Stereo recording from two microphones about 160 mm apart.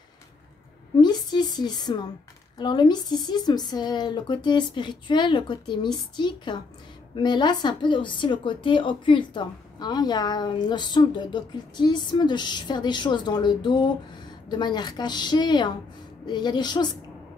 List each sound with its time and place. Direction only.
1.0 s a woman's voice: 25° left (ahead or behind)